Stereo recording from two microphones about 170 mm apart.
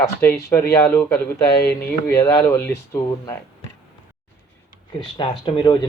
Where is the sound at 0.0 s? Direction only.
15° left (ahead or behind).